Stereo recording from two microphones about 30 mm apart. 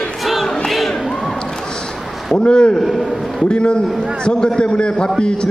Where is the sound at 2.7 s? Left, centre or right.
Centre.